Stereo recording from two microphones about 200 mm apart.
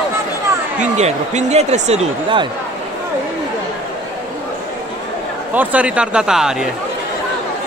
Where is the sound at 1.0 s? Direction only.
35° right (ahead or behind).